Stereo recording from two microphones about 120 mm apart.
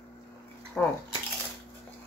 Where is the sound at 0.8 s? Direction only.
10° left (ahead or behind).